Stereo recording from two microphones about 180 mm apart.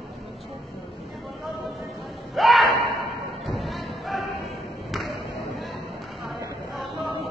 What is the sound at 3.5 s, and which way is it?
Thump, centre (ahead or behind).